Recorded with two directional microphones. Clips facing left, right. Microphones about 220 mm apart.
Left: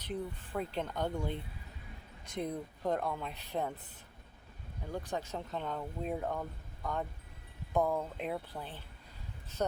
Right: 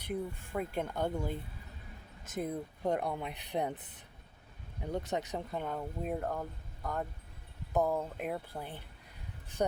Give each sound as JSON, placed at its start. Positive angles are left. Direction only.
{"t": 0.0, "sound": "speech", "side_deg": -10}